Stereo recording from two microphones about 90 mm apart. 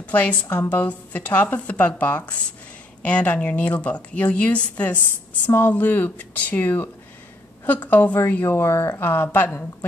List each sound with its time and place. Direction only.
0.0 s a woman's voice: 15° left (ahead or behind)